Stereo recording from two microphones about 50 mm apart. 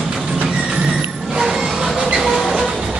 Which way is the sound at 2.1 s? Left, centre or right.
Centre.